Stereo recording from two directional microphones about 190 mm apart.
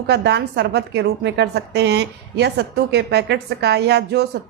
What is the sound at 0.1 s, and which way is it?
A woman's voice, 60° right (ahead or behind).